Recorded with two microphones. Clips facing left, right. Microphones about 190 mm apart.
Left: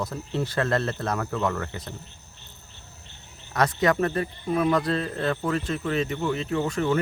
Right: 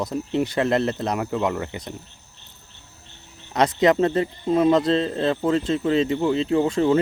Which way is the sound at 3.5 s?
20° right (ahead or behind).